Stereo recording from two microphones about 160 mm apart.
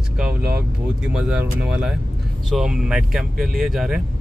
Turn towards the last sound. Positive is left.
turn(degrees=0)  # may be behind; listen again after turning